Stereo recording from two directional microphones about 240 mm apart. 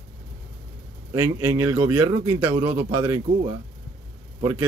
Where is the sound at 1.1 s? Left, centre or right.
Centre.